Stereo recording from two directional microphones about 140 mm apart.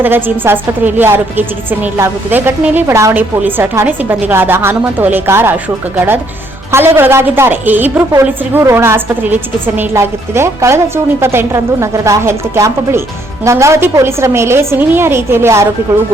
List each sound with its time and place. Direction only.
0.0 s a woman's voice: 15° right (ahead or behind)
6.7 s a woman's voice: 15° right (ahead or behind)